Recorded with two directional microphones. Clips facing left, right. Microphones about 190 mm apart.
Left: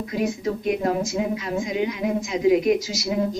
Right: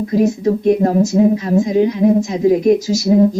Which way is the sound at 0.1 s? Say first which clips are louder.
Right 10 dB; 40° right (ahead or behind).